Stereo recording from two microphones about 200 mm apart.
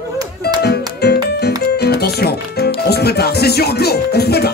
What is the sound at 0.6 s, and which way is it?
Music, 55° left (ahead or behind).